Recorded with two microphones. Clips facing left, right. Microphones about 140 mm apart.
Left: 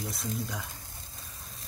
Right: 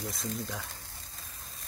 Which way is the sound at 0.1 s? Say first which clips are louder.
Left 1 dB; centre (ahead or behind).